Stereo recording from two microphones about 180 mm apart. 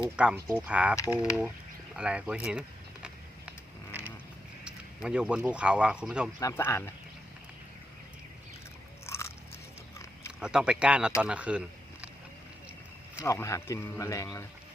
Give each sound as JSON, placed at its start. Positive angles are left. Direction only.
{"t": 0.4, "sound": "speech", "side_deg": -10}
{"t": 0.9, "sound": "speech", "side_deg": 20}
{"t": 1.2, "sound": "speech", "side_deg": -5}
{"t": 4.6, "sound": "speech", "side_deg": -5}
{"t": 6.4, "sound": "speech", "side_deg": 15}
{"t": 9.0, "sound": "biting", "side_deg": 15}
{"t": 10.4, "sound": "speech", "side_deg": -5}
{"t": 13.2, "sound": "speech", "side_deg": 15}